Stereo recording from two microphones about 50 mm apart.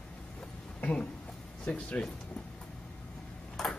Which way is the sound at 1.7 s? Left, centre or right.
Left.